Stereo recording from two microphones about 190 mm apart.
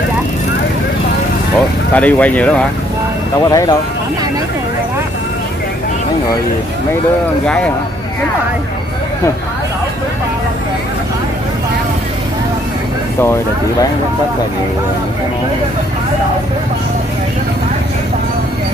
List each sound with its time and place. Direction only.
2.0 s speech: 10° left (ahead or behind)
3.4 s speech: 20° left (ahead or behind)
7.4 s speech: 5° left (ahead or behind)